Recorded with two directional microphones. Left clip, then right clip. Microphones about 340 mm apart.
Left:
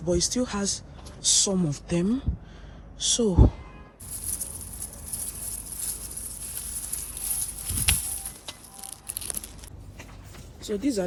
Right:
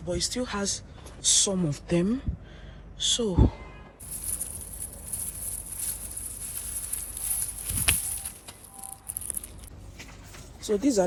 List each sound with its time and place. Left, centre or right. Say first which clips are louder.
0.0 s speech: left 4 dB; centre
10.6 s speech: right 3 dB; centre